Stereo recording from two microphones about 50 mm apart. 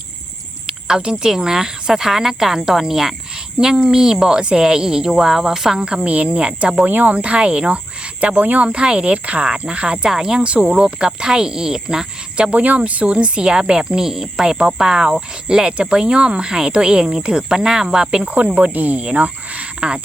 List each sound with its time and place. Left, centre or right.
0.7 s a sound: centre
1.2 s speech: centre
6.8 s cricket: right; by 12.5 s centre
12.5 s speech: right
18.3 s cricket: right